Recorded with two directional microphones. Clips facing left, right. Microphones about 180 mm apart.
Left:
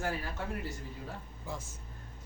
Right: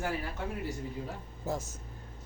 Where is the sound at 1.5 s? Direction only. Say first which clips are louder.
Right 7 dB; 45° right (ahead or behind).